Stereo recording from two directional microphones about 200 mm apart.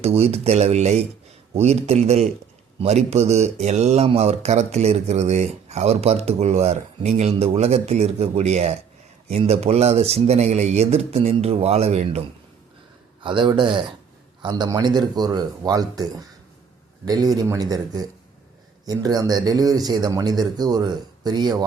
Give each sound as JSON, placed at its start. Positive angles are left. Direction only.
{"t": 0.0, "sound": "speech", "side_deg": -30}
{"t": 13.2, "sound": "speech", "side_deg": -25}
{"t": 17.3, "sound": "speech", "side_deg": -15}